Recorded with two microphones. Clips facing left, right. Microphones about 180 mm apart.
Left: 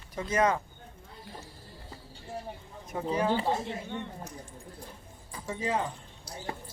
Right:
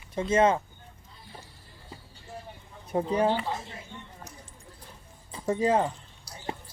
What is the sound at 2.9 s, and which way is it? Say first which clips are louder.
Speech: right 6 dB; 30° right (ahead or behind).